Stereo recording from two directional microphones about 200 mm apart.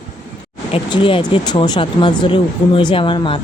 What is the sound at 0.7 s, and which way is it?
Speech, 25° left (ahead or behind).